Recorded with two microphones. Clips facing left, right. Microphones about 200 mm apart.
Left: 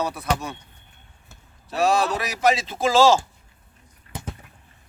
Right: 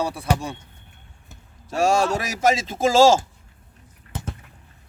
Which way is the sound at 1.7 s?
45° right (ahead or behind).